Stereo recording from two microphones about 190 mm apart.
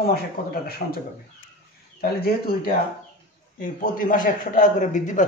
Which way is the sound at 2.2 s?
50° left (ahead or behind).